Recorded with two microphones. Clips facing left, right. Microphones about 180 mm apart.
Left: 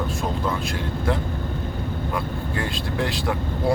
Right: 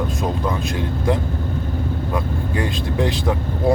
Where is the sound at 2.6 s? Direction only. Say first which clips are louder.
Right 5 dB; 20° right (ahead or behind).